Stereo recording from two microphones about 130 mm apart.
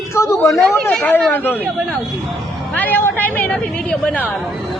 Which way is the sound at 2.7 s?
15° left (ahead or behind).